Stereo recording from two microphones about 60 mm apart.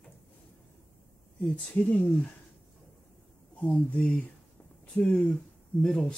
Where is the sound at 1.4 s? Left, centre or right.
Left.